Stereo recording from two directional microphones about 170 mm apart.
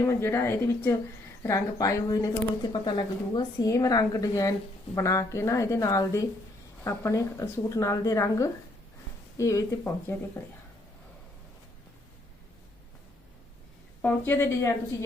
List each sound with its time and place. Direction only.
0.0 s speech: 15° left (ahead or behind)
14.0 s speech: 10° left (ahead or behind)